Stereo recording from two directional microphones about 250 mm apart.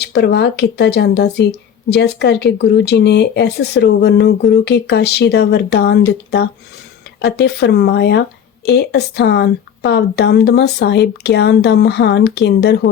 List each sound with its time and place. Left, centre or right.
0.0 s speech: left